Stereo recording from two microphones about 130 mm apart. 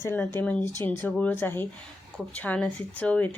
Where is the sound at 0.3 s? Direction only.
10° left (ahead or behind).